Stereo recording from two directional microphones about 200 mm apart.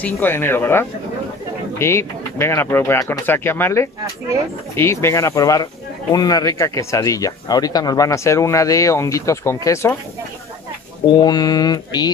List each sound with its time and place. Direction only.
0.0 s speech: 10° left (ahead or behind)
11.1 s mantra: 20° left (ahead or behind)